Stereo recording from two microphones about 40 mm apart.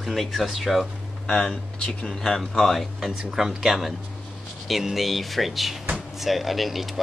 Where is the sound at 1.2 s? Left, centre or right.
Centre.